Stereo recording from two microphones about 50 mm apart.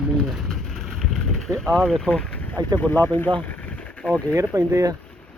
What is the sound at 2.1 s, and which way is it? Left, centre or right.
Boat, left.